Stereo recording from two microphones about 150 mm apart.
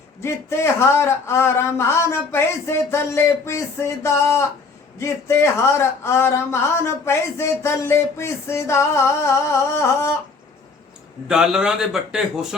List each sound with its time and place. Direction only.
0.2 s a man's voice: 15° left (ahead or behind)
11.3 s a man's voice: 5° right (ahead or behind)